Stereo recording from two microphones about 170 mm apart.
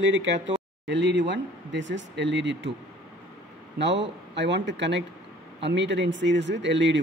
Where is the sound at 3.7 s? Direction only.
90° right.